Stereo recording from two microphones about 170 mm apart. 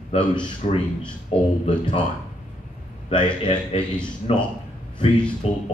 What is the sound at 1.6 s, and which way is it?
Speech, 30° left (ahead or behind).